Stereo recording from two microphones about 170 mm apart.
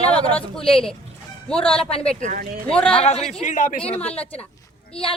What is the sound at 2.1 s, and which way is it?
Speech, 50° right (ahead or behind).